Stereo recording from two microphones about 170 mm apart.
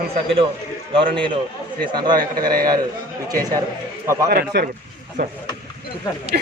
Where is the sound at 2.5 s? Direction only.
60° right (ahead or behind).